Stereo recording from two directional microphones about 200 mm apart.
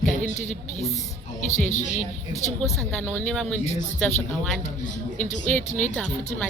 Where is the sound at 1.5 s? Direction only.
35° left (ahead or behind).